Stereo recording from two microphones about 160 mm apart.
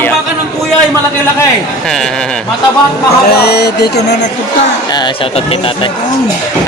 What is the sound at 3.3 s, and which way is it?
Speech, 90° left.